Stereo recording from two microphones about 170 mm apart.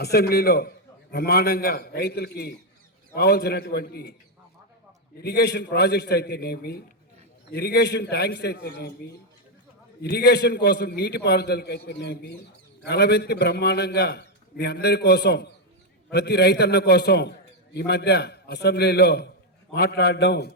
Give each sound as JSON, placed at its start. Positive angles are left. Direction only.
{"t": 0.0, "sound": "a man's voice", "side_deg": 70}
{"t": 5.2, "sound": "a man's voice", "side_deg": 70}
{"t": 10.0, "sound": "a man's voice", "side_deg": 70}